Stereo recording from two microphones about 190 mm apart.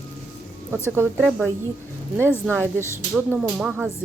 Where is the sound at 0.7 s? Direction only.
15° right (ahead or behind).